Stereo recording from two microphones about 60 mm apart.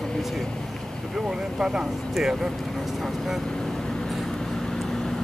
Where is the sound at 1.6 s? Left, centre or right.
Centre.